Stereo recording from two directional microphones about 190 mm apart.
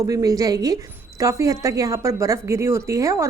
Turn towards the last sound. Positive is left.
turn(degrees=-15)  # may be behind; listen again after turning